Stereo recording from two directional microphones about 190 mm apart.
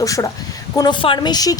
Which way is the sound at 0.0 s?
15° left (ahead or behind).